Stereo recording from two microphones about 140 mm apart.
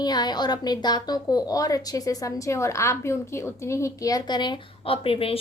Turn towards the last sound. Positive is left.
turn(degrees=40)  # may be behind; listen again after turning